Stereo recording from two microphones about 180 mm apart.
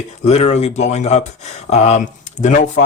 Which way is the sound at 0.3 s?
35° left (ahead or behind).